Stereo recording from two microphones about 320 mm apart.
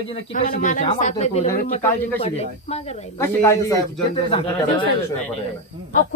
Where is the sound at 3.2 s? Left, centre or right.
Centre.